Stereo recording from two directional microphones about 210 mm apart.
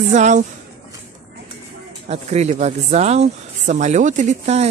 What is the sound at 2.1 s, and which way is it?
Speech, 30° right (ahead or behind).